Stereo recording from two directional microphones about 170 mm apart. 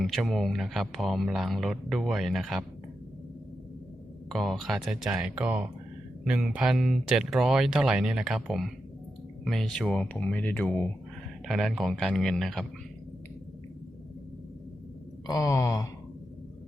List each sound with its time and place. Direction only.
0.0 s speech: centre (ahead or behind)
4.3 s speech: centre (ahead or behind)
11.4 s speech: centre (ahead or behind)
15.3 s a sound: 20° left (ahead or behind)